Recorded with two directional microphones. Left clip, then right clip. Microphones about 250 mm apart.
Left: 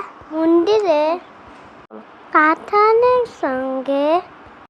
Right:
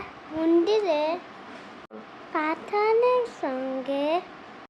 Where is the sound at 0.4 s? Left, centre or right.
Centre.